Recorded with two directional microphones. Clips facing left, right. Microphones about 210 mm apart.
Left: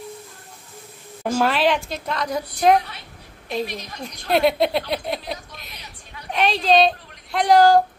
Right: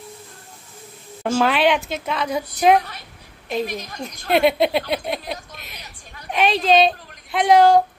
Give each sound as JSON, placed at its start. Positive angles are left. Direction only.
{"t": 1.2, "sound": "a woman's voice", "side_deg": 0}
{"t": 3.6, "sound": "a woman's voice", "side_deg": -45}
{"t": 4.3, "sound": "a woman's voice", "side_deg": 0}